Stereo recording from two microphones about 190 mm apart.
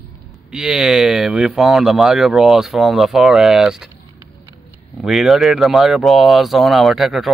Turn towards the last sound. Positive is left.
turn(degrees=0)  # may be behind; listen again after turning